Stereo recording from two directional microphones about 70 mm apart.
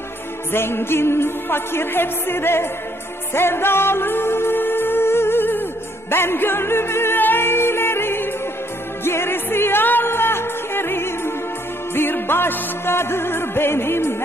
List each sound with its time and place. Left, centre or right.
0.5 s music: left